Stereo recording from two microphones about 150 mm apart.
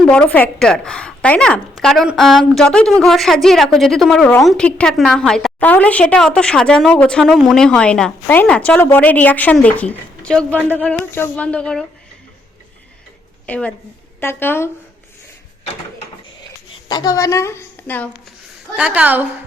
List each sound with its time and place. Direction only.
0.0 s a woman's voice: 10° left (ahead or behind)
13.5 s a woman's voice: 10° left (ahead or behind)
16.9 s a woman's voice: 25° left (ahead or behind)
18.8 s a woman's voice: 10° right (ahead or behind)